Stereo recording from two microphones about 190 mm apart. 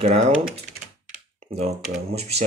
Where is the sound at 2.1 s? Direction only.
35° right (ahead or behind).